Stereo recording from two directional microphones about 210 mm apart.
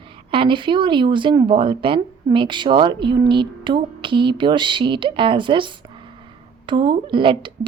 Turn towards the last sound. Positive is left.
turn(degrees=-25)  # may be behind; listen again after turning